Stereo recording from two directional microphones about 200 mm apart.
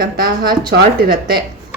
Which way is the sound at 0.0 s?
50° right (ahead or behind).